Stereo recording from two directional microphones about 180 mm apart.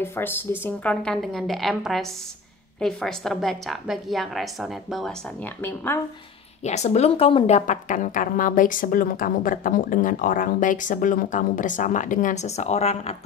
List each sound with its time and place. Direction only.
0.0 s a woman's voice: 15° left (ahead or behind)
5.4 s a woman's voice: 10° left (ahead or behind)
6.6 s a woman's voice: 40° left (ahead or behind)